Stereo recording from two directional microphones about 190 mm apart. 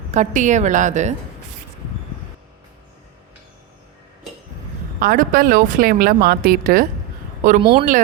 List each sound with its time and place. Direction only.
0.1 s a woman's voice: 40° right (ahead or behind)
4.9 s speech: 50° right (ahead or behind)
7.6 s a woman's voice: 25° right (ahead or behind)